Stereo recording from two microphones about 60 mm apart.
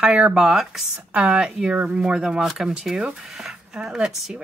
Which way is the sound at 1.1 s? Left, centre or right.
Right.